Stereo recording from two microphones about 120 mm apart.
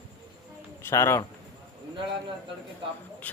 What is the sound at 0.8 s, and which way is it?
Speech, 20° left (ahead or behind).